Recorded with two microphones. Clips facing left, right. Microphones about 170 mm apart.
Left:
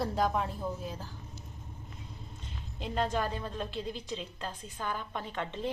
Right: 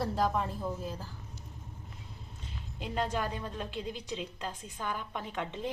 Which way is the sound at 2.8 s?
10° right (ahead or behind).